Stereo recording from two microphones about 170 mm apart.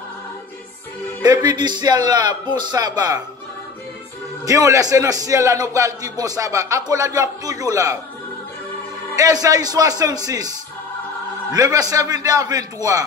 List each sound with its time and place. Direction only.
1.2 s a man's voice: 25° right (ahead or behind)
4.5 s a man's voice: 20° right (ahead or behind)
9.1 s a man's voice: 20° right (ahead or behind)
11.5 s a man's voice: 20° right (ahead or behind)